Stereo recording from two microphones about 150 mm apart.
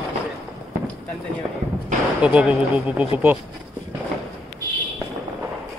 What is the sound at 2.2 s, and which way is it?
Speech, 5° right (ahead or behind).